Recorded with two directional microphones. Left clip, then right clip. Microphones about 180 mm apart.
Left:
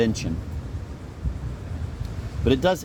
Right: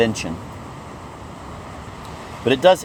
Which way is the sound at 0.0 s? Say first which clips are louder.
Right 5 dB; 45° left (ahead or behind).